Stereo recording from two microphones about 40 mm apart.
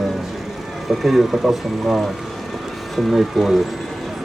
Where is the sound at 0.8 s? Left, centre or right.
Centre.